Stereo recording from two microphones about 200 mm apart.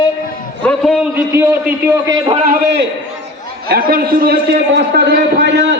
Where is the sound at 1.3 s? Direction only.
15° right (ahead or behind).